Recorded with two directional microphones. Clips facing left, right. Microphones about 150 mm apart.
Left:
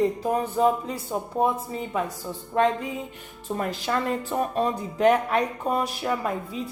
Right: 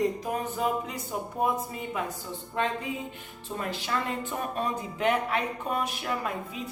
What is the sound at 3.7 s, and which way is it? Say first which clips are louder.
A woman's voice: left 4 dB; 40° left (ahead or behind).